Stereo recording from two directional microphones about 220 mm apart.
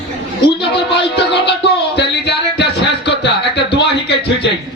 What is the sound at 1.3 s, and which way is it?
Music, 50° left (ahead or behind).